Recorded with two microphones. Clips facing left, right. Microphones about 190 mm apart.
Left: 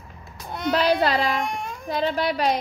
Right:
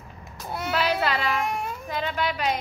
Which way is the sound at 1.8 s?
35° left (ahead or behind).